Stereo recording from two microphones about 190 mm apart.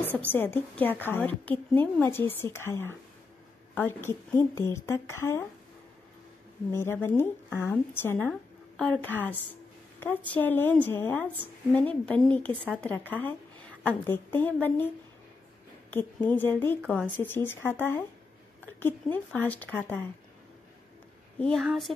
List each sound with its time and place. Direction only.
0.2 s a woman's voice: 10° left (ahead or behind)
6.7 s a woman's voice: 15° left (ahead or behind)
15.9 s a woman's voice: 10° left (ahead or behind)
21.4 s a woman's voice: centre (ahead or behind)